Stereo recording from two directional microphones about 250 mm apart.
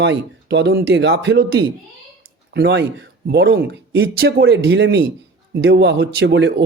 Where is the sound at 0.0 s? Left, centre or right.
Right.